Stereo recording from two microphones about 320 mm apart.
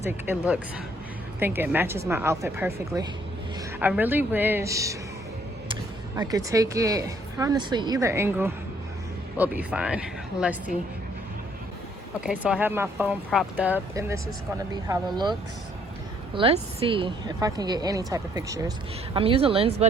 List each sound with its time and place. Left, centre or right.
0.0 s a woman's voice: centre
3.8 s speech: centre
6.1 s a woman's voice: centre
12.2 s a woman's voice: centre